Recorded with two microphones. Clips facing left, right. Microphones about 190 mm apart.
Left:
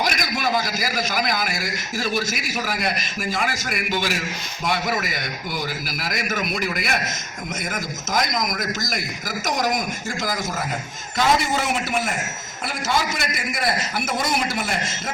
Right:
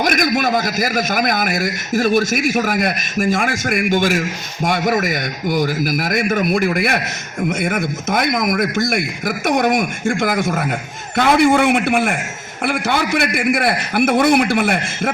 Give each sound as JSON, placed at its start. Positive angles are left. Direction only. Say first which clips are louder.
{"t": 0.0, "sound": "a man's voice", "louder": "right 7 dB", "side_deg": -50}